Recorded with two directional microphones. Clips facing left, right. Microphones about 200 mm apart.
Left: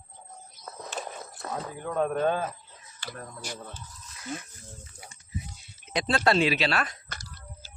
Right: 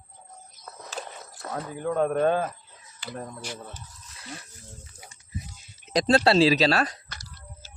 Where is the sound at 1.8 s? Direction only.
55° right (ahead or behind).